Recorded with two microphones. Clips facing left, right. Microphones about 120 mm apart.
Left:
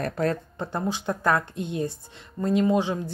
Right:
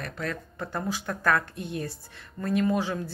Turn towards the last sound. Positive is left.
turn(degrees=20)  # may be behind; listen again after turning